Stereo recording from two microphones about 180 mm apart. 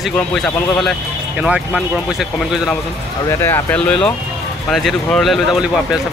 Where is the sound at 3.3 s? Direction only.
15° left (ahead or behind).